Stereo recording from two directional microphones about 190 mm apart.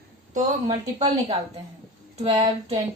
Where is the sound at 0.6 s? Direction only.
30° right (ahead or behind).